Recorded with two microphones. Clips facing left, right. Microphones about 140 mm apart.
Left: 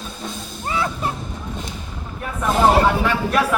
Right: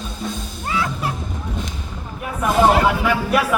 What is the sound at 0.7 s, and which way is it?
Music, 30° left (ahead or behind).